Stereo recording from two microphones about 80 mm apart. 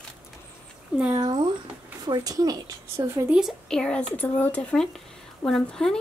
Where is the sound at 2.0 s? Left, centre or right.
Right.